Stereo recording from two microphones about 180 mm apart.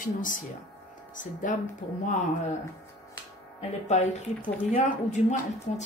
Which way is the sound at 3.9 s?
40° left (ahead or behind).